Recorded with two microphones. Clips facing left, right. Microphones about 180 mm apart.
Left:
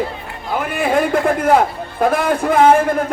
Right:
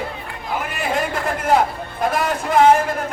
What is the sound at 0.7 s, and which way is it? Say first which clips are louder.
Speech: left 9 dB; 55° left (ahead or behind).